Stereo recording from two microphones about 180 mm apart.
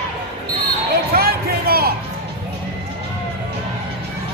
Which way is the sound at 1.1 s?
55° right (ahead or behind).